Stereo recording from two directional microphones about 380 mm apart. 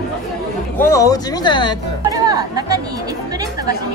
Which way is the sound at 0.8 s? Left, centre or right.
Centre.